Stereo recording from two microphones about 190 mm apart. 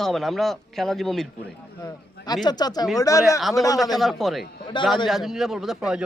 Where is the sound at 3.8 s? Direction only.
Centre (ahead or behind).